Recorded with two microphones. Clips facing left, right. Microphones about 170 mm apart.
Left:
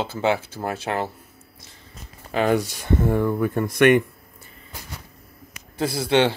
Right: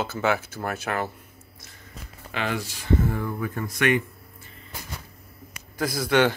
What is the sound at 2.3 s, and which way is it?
Speech, 40° left (ahead or behind).